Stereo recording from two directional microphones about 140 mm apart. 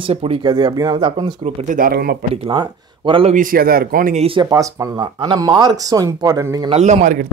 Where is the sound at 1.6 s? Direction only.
90° right.